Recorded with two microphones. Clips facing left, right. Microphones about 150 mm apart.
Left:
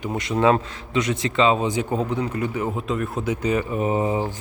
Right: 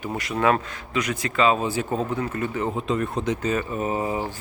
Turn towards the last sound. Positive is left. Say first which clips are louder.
# left 3 dB
turn(degrees=20)  # may be behind; listen again after turning